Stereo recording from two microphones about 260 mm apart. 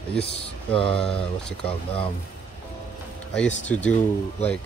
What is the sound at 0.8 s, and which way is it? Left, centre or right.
Speech, centre.